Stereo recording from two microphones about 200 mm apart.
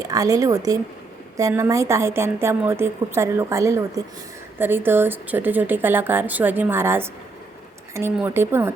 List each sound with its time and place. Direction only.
0.0 s a woman's voice: 15° right (ahead or behind)